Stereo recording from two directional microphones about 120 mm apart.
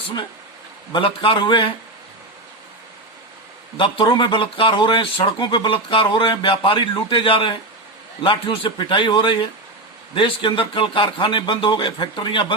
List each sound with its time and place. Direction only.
0.9 s speech: 45° left (ahead or behind)
3.8 s speech: 45° left (ahead or behind)